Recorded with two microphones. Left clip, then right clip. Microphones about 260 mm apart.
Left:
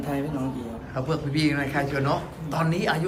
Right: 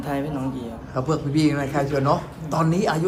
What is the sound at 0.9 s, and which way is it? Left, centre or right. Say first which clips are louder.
A man's voice: right 4 dB; centre.